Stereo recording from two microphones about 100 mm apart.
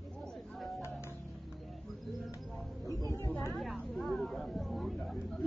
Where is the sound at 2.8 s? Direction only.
35° right (ahead or behind).